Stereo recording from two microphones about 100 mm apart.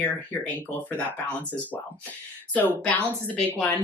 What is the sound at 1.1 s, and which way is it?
Speech, 15° left (ahead or behind).